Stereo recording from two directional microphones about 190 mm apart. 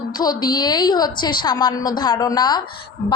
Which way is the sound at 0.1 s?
20° left (ahead or behind).